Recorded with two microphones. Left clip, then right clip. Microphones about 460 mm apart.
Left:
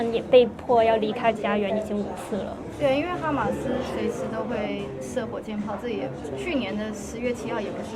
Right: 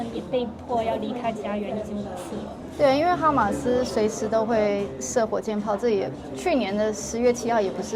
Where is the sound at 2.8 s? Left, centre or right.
Right.